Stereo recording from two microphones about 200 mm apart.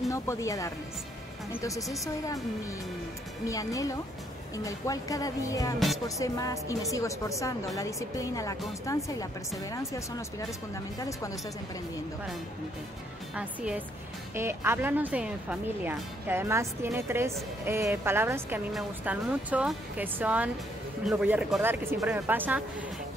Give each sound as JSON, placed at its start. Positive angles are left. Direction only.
{"t": 0.1, "sound": "speech", "side_deg": 15}
{"t": 3.4, "sound": "speech", "side_deg": 15}
{"t": 13.3, "sound": "speech", "side_deg": -5}